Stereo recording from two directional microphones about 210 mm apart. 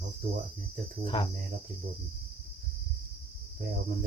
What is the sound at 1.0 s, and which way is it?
Speech, 25° left (ahead or behind).